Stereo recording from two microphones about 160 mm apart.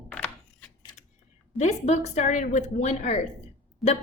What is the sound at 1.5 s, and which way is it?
A woman's voice, 45° left (ahead or behind).